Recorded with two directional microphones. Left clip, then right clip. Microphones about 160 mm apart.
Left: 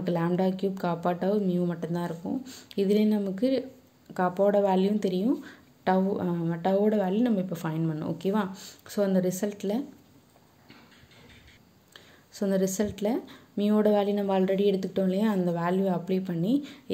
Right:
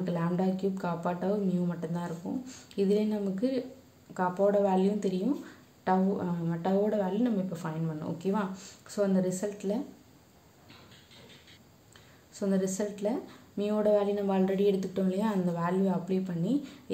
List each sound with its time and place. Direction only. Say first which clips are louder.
0.0 s speech: left 4 dB; 40° left (ahead or behind)
12.4 s speech: left 4 dB; 40° left (ahead or behind)